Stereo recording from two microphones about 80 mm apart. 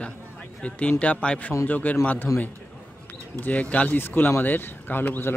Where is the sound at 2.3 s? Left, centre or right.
Left.